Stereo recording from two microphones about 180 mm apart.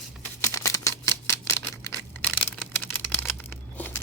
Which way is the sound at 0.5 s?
20° left (ahead or behind).